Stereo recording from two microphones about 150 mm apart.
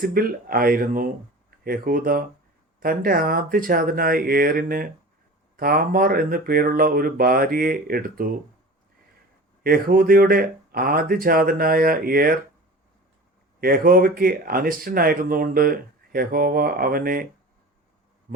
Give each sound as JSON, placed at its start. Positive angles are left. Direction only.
{"t": 0.0, "sound": "speech", "side_deg": -75}
{"t": 9.6, "sound": "speech", "side_deg": -80}
{"t": 13.6, "sound": "speech", "side_deg": -75}
{"t": 18.3, "sound": "heart sounds", "side_deg": -65}